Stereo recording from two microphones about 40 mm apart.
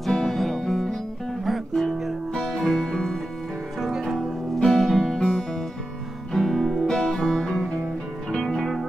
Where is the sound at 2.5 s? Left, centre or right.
Centre.